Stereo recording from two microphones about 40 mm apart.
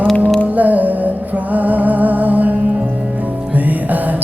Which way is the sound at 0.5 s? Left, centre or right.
Right.